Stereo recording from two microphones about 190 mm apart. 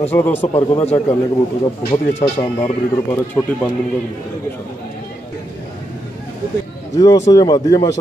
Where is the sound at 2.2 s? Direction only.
30° left (ahead or behind).